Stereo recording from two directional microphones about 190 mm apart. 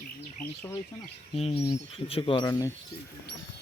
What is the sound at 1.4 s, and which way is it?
Speech, 30° left (ahead or behind).